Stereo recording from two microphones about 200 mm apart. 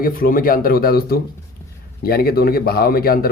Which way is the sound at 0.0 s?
45° left (ahead or behind).